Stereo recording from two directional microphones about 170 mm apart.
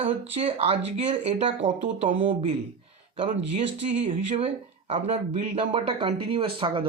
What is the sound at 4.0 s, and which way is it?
Speech, 30° right (ahead or behind).